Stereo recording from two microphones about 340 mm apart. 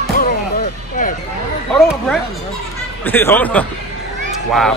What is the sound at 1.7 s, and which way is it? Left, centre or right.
Speech, centre.